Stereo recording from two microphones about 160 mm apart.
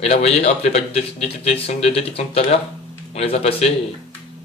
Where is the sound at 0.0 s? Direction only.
40° left (ahead or behind).